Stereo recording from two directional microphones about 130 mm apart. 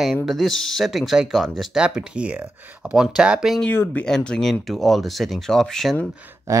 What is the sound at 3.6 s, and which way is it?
Speech, 15° left (ahead or behind).